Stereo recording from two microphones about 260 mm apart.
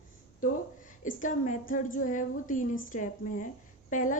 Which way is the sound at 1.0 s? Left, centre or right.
Left.